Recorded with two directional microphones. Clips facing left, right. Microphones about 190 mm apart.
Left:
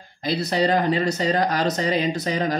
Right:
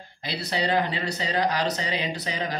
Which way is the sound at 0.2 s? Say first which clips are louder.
Left 7 dB; 45° left (ahead or behind).